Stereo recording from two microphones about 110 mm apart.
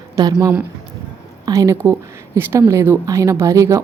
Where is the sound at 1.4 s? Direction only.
30° right (ahead or behind).